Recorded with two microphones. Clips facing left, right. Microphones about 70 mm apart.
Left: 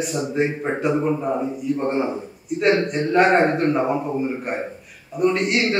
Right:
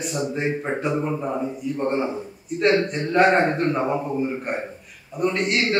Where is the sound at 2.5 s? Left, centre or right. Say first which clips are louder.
Left 1 dB; centre.